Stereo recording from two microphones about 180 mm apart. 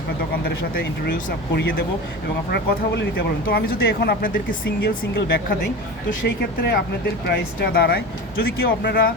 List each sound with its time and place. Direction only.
0.7 s speech: 65° left (ahead or behind)
2.5 s speech: 65° left (ahead or behind)